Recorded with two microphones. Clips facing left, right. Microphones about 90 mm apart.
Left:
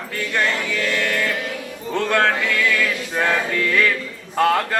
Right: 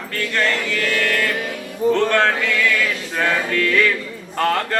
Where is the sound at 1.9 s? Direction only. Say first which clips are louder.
Right 1 dB; 5° left (ahead or behind).